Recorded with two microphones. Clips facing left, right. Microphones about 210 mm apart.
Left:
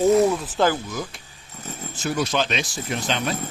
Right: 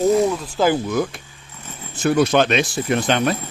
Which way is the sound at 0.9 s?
60° right (ahead or behind).